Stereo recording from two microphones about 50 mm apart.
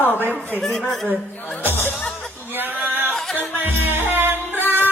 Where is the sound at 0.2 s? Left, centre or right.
Right.